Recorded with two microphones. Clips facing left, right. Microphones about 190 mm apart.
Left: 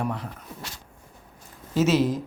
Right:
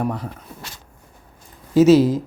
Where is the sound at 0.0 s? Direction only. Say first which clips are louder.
Right 5 dB; 40° right (ahead or behind).